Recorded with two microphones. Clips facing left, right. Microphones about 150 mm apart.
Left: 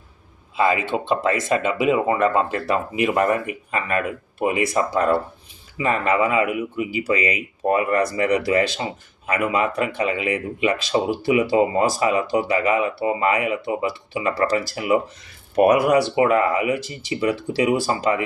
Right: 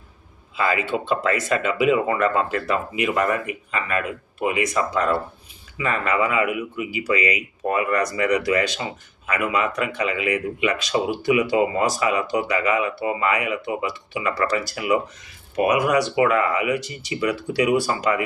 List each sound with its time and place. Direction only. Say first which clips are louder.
0.5 s speech: left 3 dB; 25° left (ahead or behind)
15.6 s speech: left 5 dB; 50° left (ahead or behind)
16.1 s speech: left 2 dB; 35° left (ahead or behind)